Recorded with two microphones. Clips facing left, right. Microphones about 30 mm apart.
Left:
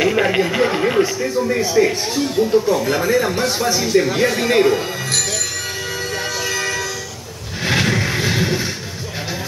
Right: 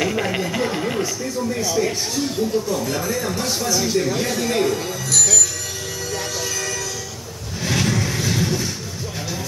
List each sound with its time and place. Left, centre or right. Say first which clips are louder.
0.0 s speech: left 6 dB; left
4.1 s speech: left 5 dB; left
6.1 s music: left 3 dB; left
7.6 s vehicle: left 4 dB; left